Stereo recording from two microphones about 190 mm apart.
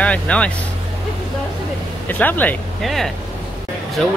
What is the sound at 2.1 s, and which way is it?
Speech, 10° left (ahead or behind).